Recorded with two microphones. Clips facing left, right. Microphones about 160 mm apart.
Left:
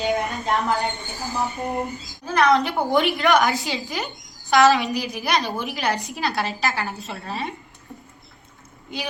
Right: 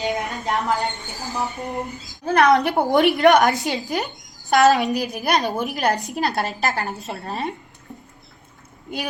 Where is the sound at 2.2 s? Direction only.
55° right (ahead or behind).